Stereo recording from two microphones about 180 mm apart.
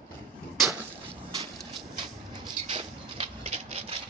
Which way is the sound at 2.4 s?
30° right (ahead or behind).